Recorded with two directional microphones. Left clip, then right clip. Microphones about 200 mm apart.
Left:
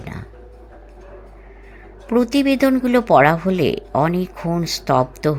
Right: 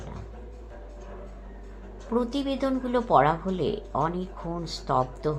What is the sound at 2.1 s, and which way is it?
Speech, 60° left (ahead or behind).